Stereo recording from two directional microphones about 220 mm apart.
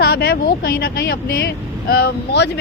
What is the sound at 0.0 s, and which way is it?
Speech, 45° left (ahead or behind).